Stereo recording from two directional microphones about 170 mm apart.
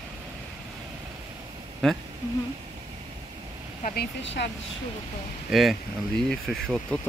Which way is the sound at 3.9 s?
80° left.